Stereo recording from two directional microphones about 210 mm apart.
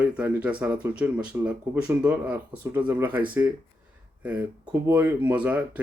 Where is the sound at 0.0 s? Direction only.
5° right (ahead or behind).